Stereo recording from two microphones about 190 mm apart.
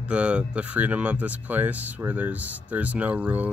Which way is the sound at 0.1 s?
5° right (ahead or behind).